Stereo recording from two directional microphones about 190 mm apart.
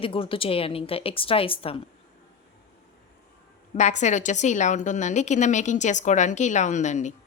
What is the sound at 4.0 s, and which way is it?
A woman's voice, 40° left (ahead or behind).